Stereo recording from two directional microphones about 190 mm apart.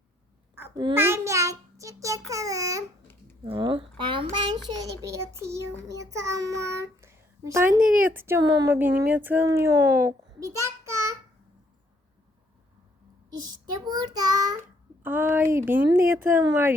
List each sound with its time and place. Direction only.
0.5 s babbling: 10° right (ahead or behind)
0.9 s a child's voice: 15° right (ahead or behind)
7.0 s a sound: 15° right (ahead or behind)
8.0 s speech: 10° right (ahead or behind)
13.8 s child singing: 20° right (ahead or behind)
15.0 s speech: 10° right (ahead or behind)